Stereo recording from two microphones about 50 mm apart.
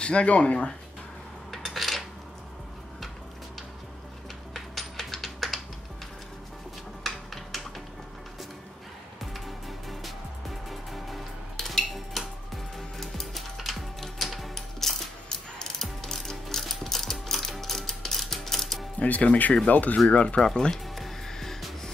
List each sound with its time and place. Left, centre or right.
0.0 s speech: left
1.5 s coin: centre
4.6 s a sound: centre
7.1 s a sound: centre
9.2 s music: centre
19.2 s speech: left; by 20.7 s centre
20.7 s music: centre